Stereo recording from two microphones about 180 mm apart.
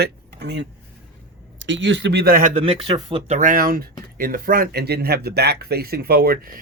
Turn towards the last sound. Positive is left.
turn(degrees=-55)  # may be behind; listen again after turning